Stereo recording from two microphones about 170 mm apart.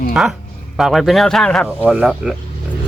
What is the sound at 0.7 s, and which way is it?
Speech, centre (ahead or behind).